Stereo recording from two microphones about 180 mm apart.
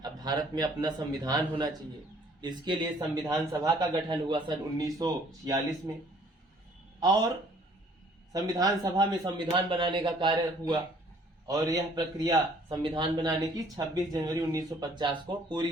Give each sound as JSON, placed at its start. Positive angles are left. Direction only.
{"t": 0.0, "sound": "a man's voice", "side_deg": -20}
{"t": 7.0, "sound": "speech", "side_deg": -20}
{"t": 8.3, "sound": "a man's voice", "side_deg": -20}